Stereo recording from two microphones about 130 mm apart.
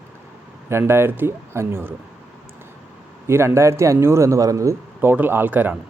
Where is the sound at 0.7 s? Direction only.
20° right (ahead or behind).